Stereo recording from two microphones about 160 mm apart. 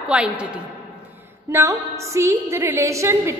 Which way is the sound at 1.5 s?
20° right (ahead or behind).